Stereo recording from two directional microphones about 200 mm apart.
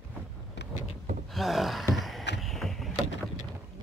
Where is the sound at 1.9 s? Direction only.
Centre (ahead or behind).